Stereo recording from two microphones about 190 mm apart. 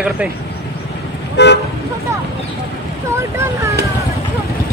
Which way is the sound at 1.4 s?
65° left (ahead or behind).